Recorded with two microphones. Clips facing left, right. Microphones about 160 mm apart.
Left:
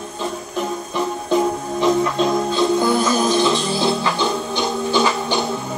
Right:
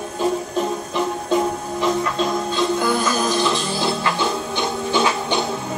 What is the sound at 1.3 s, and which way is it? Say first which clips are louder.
Music: left 2 dB; centre (ahead or behind).